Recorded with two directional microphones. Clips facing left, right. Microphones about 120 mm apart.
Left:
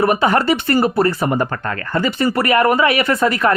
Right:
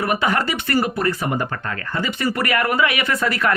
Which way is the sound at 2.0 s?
35° left (ahead or behind).